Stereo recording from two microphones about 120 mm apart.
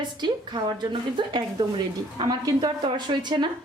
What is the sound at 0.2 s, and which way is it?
A woman's voice, 35° right (ahead or behind).